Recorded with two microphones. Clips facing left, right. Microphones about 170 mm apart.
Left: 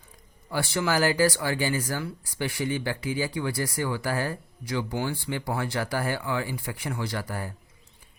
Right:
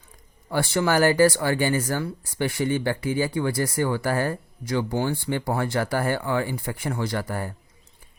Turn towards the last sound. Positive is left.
turn(degrees=-50)  # may be behind; listen again after turning